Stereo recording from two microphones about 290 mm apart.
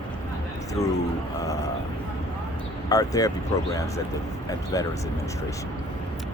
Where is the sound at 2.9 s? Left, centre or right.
Centre.